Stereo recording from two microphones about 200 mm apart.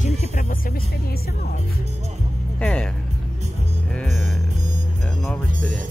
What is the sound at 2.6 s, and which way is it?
Speech, 5° left (ahead or behind).